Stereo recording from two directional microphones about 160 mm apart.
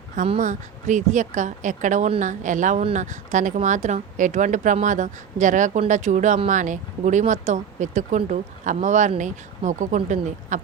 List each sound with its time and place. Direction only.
0.3 s speech: 50° right (ahead or behind)